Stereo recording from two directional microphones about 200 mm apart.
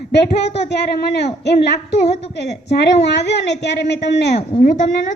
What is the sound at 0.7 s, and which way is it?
Speech, 55° left (ahead or behind).